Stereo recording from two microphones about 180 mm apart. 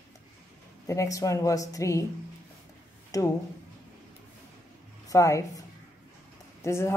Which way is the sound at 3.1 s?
20° left (ahead or behind).